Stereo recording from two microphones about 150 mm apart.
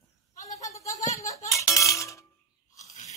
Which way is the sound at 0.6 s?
20° left (ahead or behind).